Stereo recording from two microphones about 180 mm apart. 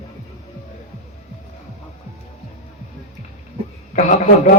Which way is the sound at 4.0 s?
45° left (ahead or behind).